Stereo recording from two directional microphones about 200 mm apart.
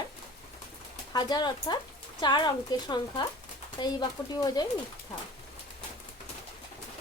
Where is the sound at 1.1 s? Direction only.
20° left (ahead or behind).